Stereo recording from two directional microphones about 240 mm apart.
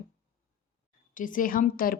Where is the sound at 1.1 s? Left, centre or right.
Left.